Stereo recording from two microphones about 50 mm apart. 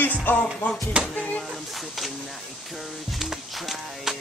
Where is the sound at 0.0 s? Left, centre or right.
Left.